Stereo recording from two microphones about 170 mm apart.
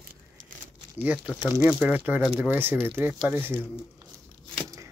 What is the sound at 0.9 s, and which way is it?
Speech, 10° right (ahead or behind).